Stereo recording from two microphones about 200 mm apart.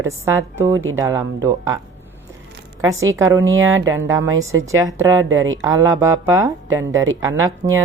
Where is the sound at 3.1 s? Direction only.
15° right (ahead or behind).